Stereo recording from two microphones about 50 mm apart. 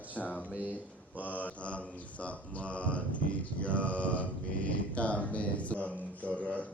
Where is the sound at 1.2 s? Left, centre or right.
Left.